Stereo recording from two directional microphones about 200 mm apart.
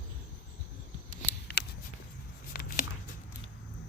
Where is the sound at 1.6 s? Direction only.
55° left (ahead or behind).